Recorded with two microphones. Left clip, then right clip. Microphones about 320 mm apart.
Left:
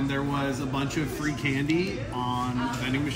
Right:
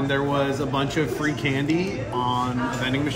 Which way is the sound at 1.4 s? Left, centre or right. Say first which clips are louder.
Right 4 dB; centre.